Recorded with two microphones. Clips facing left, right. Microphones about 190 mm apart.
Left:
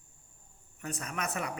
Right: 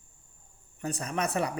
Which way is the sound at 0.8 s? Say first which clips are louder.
Right 6 dB; 35° right (ahead or behind).